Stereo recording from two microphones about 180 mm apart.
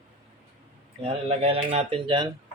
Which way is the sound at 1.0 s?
35° right (ahead or behind).